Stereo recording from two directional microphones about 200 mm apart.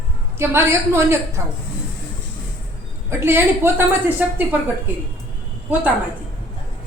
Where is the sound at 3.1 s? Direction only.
10° right (ahead or behind).